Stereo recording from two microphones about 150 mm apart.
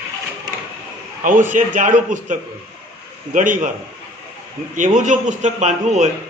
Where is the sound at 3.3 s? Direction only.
60° right (ahead or behind).